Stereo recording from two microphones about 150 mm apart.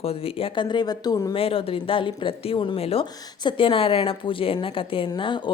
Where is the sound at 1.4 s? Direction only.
40° left (ahead or behind).